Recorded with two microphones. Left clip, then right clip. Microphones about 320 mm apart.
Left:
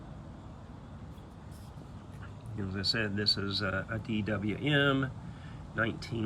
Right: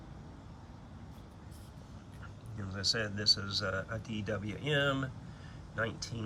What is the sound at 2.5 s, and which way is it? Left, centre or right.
Speech, centre.